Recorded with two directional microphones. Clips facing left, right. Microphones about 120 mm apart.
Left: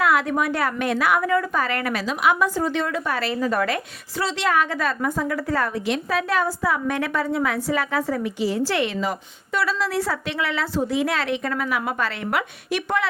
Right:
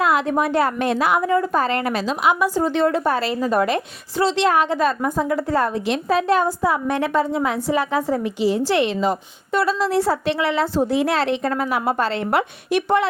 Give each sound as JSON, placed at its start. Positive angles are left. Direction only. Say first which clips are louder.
{"t": 0.0, "sound": "a woman's voice", "louder": "right 2 dB", "side_deg": -25}